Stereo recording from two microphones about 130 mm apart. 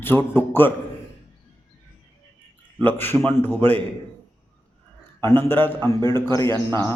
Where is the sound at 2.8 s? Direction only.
15° left (ahead or behind).